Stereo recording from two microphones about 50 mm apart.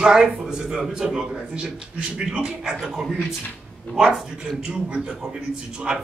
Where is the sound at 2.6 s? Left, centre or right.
Centre.